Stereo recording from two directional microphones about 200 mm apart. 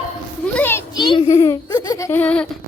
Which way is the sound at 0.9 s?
20° left (ahead or behind).